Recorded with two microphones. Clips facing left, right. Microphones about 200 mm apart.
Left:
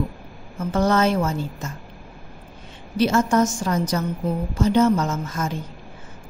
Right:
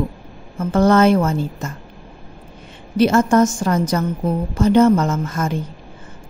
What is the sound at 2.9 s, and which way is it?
A woman's voice, 55° right (ahead or behind).